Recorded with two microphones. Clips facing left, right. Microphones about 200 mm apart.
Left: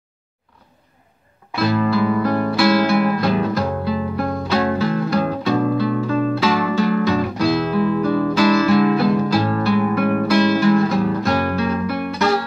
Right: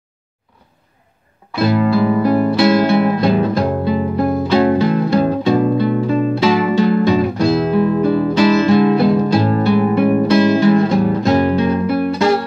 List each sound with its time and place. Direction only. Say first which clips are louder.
1.6 s music: right 4 dB; 20° right (ahead or behind)